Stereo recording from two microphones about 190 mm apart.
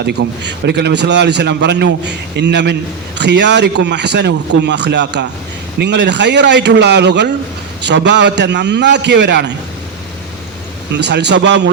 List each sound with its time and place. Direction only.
0.0 s a man's voice: 65° right (ahead or behind)
10.9 s a man's voice: 65° right (ahead or behind)